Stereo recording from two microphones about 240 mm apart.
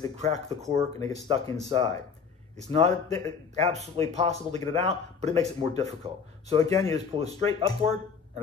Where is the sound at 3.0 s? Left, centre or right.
Centre.